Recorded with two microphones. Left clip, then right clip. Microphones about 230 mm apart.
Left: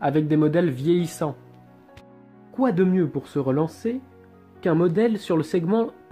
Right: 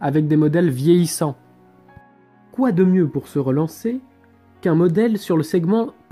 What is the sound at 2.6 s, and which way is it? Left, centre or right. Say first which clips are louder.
Speech: right 3 dB; right.